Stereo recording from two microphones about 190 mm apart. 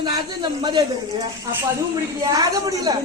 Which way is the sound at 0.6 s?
25° right (ahead or behind).